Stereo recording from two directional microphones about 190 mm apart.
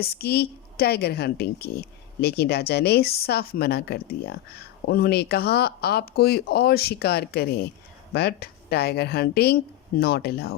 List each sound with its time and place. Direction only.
0.0 s a woman's voice: 55° left (ahead or behind)